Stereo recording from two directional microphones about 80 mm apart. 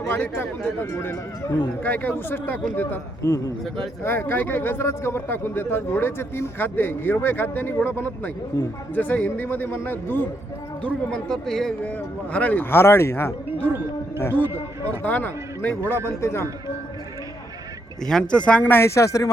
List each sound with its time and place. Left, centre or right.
0.1 s speech: left
3.2 s a man's voice: left
4.0 s speech: left
10.8 s speech: centre
11.8 s speech: centre
12.7 s speech: left
18.0 s speech: centre
18.7 s speech: left